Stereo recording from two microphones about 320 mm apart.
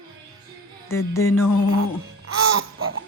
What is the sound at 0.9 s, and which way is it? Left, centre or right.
Music, centre.